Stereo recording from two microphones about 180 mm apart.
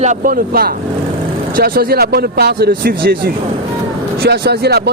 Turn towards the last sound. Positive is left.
turn(degrees=-65)  # may be behind; listen again after turning